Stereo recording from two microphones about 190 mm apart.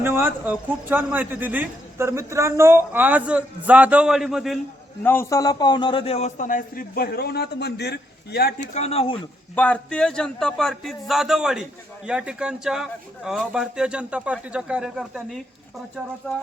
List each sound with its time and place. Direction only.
0.0 s a man's voice: 10° right (ahead or behind)
5.0 s a man's voice: 15° left (ahead or behind); by 8.7 s 55° left (ahead or behind)
8.7 s a man's voice: 35° left (ahead or behind)
9.6 s a man's voice: 5° left (ahead or behind)